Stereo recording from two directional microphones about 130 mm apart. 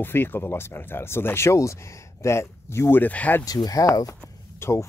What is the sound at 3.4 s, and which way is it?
Speech, 30° left (ahead or behind).